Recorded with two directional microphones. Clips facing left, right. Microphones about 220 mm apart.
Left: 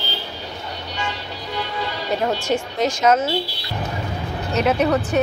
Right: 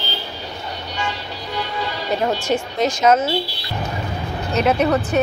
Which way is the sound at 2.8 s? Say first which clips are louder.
Right 2 dB; 20° right (ahead or behind).